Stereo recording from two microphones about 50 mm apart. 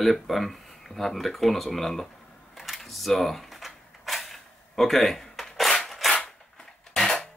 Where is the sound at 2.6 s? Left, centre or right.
Centre.